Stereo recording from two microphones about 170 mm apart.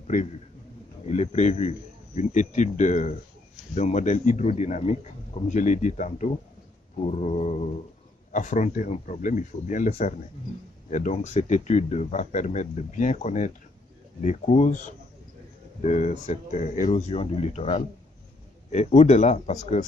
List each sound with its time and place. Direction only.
0.0 s a sound: 45° left (ahead or behind)
1.0 s speech: 40° left (ahead or behind)
15.8 s speech: 45° left (ahead or behind)